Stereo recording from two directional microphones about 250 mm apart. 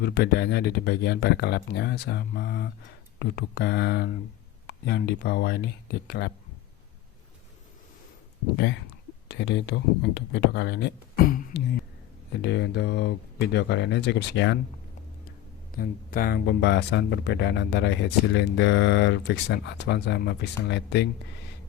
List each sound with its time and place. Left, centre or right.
0.0 s speech: left
9.3 s speech: left
15.7 s speech: left